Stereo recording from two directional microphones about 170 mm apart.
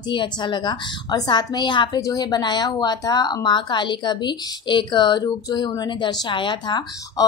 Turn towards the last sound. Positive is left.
turn(degrees=25)  # may be behind; listen again after turning